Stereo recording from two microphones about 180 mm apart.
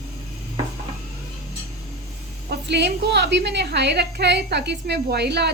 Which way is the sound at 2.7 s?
70° right (ahead or behind).